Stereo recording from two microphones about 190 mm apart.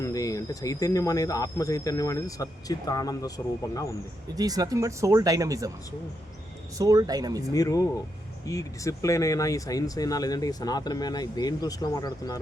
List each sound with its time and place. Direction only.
0.0 s speech: 15° left (ahead or behind)
4.4 s speech: 20° right (ahead or behind)
6.7 s speech: 20° right (ahead or behind)
7.5 s speech: 20° left (ahead or behind)